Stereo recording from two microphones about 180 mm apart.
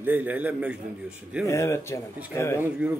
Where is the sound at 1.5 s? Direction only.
15° left (ahead or behind).